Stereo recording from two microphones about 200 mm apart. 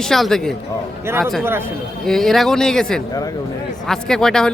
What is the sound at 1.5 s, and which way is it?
Speech, 10° right (ahead or behind).